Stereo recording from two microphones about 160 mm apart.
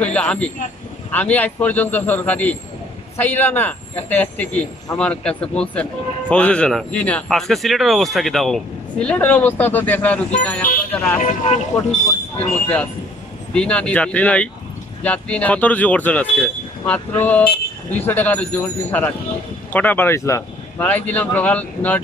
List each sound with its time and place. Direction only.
0.0 s speech: 5° left (ahead or behind)
11.1 s speech: 45° left (ahead or behind)
13.5 s speech: 5° left (ahead or behind)